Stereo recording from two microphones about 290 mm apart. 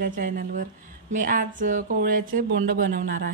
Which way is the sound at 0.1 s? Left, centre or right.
Right.